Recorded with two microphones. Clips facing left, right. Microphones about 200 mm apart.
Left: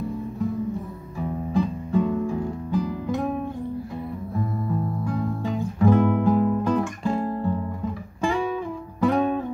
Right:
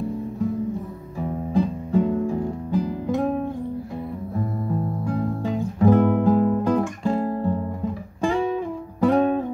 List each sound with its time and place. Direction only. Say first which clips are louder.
1.2 s music: right 2 dB; 35° right (ahead or behind)
4.6 s guitar: right 1 dB; 35° right (ahead or behind)
8.2 s music: right 2 dB; 35° right (ahead or behind)